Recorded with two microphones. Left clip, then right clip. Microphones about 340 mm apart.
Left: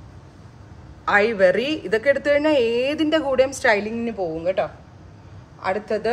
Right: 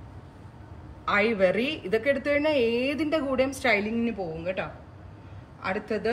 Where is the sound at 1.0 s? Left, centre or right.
Left.